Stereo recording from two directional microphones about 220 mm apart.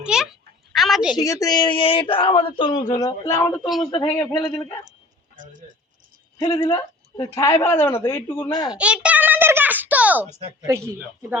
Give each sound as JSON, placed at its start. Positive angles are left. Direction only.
{"t": 0.0, "sound": "a sound", "side_deg": -5}
{"t": 1.1, "sound": "speech", "side_deg": 15}
{"t": 3.9, "sound": "speech", "side_deg": 25}
{"t": 4.2, "sound": "a woman's voice", "side_deg": 10}
{"t": 6.4, "sound": "a woman's voice", "side_deg": 20}
{"t": 8.7, "sound": "a sound", "side_deg": -5}
{"t": 10.7, "sound": "speech", "side_deg": -10}